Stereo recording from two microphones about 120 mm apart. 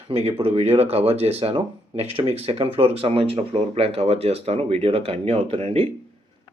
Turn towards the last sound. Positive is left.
turn(degrees=-55)  # may be behind; listen again after turning